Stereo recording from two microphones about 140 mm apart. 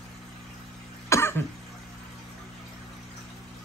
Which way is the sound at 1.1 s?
20° left (ahead or behind).